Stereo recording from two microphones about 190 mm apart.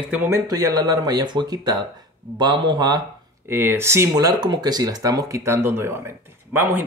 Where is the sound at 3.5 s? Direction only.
10° right (ahead or behind).